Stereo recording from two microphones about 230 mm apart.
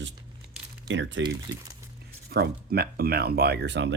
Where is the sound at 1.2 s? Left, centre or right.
Right.